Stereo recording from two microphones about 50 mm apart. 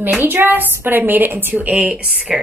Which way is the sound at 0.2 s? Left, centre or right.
Right.